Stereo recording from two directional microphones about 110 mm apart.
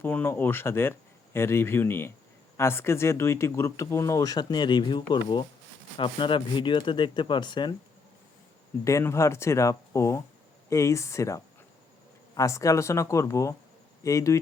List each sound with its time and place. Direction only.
0.0 s speech: 15° left (ahead or behind); by 7.7 s 45° left (ahead or behind)
8.8 s speech: 25° left (ahead or behind)